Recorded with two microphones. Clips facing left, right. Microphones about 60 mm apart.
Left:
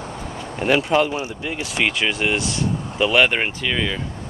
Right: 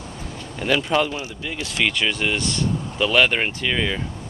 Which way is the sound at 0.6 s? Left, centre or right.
Centre.